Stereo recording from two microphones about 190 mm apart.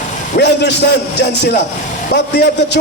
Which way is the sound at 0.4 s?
60° left (ahead or behind).